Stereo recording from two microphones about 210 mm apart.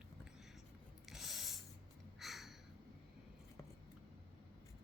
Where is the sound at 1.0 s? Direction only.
Centre (ahead or behind).